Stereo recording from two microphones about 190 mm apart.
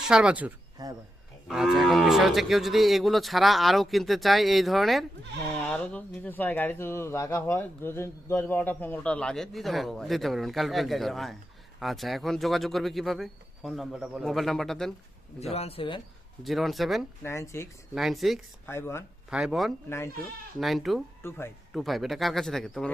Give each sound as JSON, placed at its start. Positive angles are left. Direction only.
{"t": 0.1, "sound": "speech", "side_deg": -5}
{"t": 0.8, "sound": "speech", "side_deg": -20}
{"t": 1.5, "sound": "speech", "side_deg": 0}
{"t": 15.5, "sound": "speech", "side_deg": 30}
{"t": 16.4, "sound": "speech", "side_deg": 0}
{"t": 17.2, "sound": "speech", "side_deg": 15}
{"t": 17.9, "sound": "speech", "side_deg": 0}
{"t": 18.6, "sound": "speech", "side_deg": 15}
{"t": 19.3, "sound": "speech", "side_deg": -5}
{"t": 21.2, "sound": "speech", "side_deg": 15}
{"t": 21.7, "sound": "speech", "side_deg": 0}